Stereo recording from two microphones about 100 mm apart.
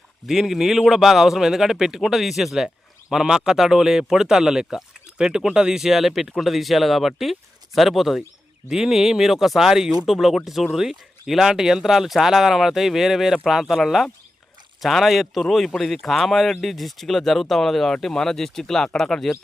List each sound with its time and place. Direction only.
0.3 s speech: centre (ahead or behind)